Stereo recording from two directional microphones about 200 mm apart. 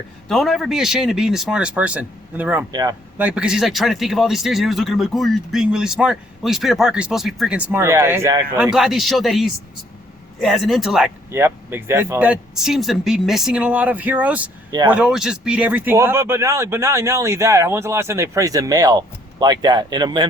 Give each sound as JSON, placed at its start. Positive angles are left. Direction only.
{"t": 0.3, "sound": "speech", "side_deg": 0}
{"t": 3.2, "sound": "speech", "side_deg": -5}
{"t": 11.3, "sound": "speech", "side_deg": -10}